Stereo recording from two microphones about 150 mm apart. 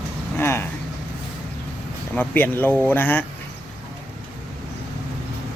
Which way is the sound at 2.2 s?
10° left (ahead or behind).